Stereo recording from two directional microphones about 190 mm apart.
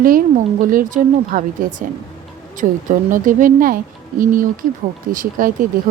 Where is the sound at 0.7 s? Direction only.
45° right (ahead or behind).